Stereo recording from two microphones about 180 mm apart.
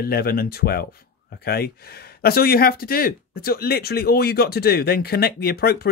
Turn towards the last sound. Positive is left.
turn(degrees=60)  # may be behind; listen again after turning